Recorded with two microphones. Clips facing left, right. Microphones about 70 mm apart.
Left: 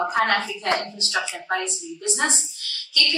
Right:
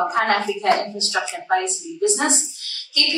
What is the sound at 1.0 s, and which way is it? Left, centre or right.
A woman's voice, right.